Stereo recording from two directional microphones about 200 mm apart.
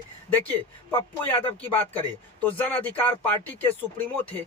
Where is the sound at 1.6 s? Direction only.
10° left (ahead or behind).